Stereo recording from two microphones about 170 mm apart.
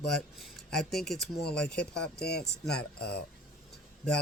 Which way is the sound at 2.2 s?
70° left (ahead or behind).